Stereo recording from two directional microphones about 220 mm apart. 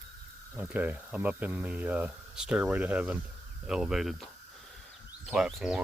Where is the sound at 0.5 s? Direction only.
10° right (ahead or behind).